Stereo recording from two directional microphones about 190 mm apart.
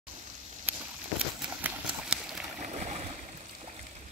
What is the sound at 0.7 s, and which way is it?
Walk, 10° right (ahead or behind).